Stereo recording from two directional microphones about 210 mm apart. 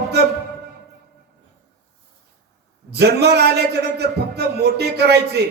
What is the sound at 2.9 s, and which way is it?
A man's voice, 50° right (ahead or behind).